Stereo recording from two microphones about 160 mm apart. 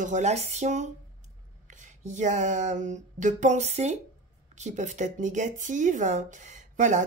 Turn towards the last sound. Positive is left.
turn(degrees=-50)  # may be behind; listen again after turning